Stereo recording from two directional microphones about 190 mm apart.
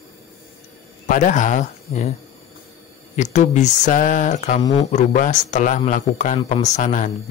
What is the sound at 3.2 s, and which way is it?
Speech, 40° left (ahead or behind).